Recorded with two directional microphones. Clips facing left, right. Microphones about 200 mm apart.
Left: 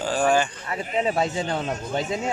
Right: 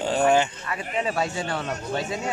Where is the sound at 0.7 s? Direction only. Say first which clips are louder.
Left 5 dB; 20° left (ahead or behind).